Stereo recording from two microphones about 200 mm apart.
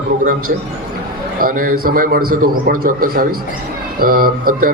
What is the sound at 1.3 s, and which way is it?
A man's voice, 45° right (ahead or behind).